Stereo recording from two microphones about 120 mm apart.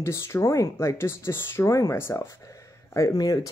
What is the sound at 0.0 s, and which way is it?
Speech, 25° left (ahead or behind).